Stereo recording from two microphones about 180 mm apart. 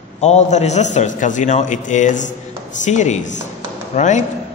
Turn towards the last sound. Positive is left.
turn(degrees=40)  # may be behind; listen again after turning